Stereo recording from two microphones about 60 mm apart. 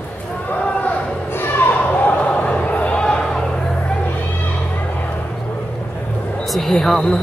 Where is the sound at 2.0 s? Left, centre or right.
Left.